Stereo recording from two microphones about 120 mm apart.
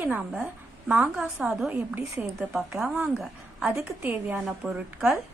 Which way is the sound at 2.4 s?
Centre (ahead or behind).